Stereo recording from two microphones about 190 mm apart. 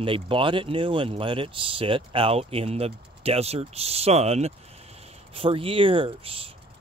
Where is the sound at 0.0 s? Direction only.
25° right (ahead or behind).